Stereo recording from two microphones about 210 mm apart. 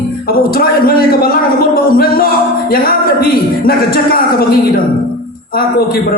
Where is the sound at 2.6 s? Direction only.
45° left (ahead or behind).